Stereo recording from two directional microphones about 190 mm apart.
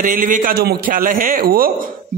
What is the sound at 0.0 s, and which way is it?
A man's voice, 45° right (ahead or behind).